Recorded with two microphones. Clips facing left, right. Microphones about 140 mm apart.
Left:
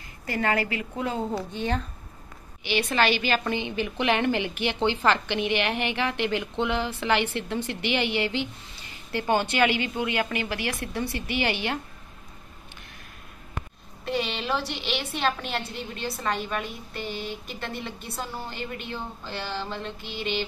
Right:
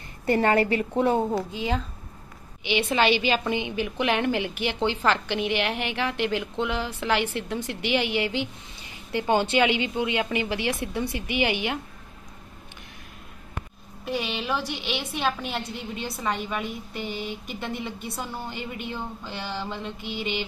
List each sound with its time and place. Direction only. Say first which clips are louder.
0.3 s a woman's voice: right 5 dB; 30° right (ahead or behind)
2.6 s a woman's voice: right 1 dB; 15° right (ahead or behind)
14.0 s a woman's voice: even; 10° right (ahead or behind)